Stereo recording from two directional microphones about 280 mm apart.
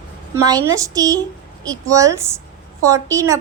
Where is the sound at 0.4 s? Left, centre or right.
Centre.